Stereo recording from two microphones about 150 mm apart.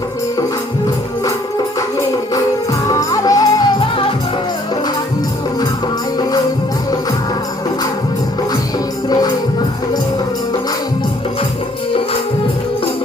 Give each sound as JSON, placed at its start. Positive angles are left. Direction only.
{"t": 2.8, "sound": "music", "side_deg": 25}
{"t": 3.8, "sound": "music", "side_deg": 35}
{"t": 9.0, "sound": "music", "side_deg": 25}